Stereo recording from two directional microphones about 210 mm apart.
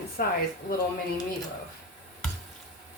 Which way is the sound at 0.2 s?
45° left (ahead or behind).